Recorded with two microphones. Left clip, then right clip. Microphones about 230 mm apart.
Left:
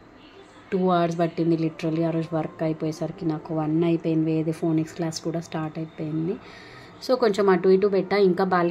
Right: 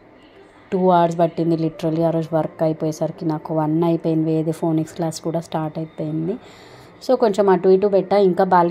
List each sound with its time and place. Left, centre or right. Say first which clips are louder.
0.7 s speech: right 7 dB; centre